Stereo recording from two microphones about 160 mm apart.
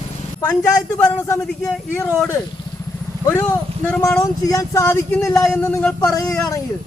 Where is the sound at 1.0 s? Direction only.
20° left (ahead or behind).